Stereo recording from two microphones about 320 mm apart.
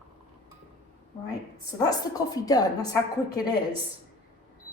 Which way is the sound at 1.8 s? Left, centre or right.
Centre.